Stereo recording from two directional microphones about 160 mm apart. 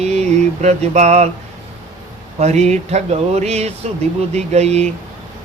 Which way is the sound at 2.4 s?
45° right (ahead or behind).